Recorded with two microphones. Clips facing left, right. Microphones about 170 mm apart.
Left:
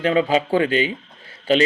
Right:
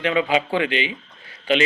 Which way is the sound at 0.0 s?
35° left (ahead or behind).